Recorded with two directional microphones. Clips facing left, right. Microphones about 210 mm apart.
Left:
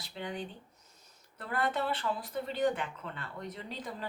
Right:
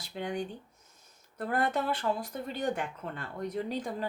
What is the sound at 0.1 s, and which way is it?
Speech, 45° right (ahead or behind).